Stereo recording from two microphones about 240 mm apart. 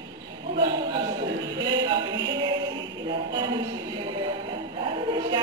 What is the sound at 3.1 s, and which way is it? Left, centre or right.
Speech, centre.